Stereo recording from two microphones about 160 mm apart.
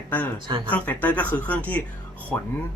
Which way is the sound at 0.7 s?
10° left (ahead or behind).